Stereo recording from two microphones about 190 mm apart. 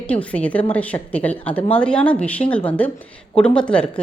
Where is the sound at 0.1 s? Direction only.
5° left (ahead or behind).